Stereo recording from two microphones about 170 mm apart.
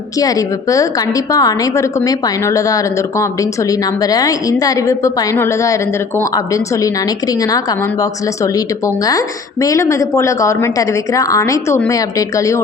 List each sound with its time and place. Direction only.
0.2 s a woman's voice: 20° left (ahead or behind)
9.0 s a woman's voice: 20° left (ahead or behind)